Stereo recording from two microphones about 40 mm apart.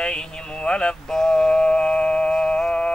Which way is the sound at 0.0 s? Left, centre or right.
Left.